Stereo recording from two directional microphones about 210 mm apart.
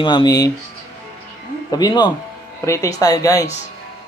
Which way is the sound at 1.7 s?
20° left (ahead or behind).